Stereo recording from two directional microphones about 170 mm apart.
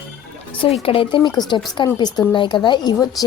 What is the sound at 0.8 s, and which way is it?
A woman's voice, 30° left (ahead or behind).